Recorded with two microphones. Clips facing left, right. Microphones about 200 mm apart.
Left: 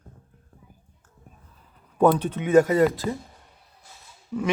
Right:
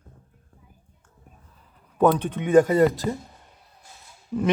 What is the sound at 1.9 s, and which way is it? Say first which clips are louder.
Speech: even; 10° left (ahead or behind).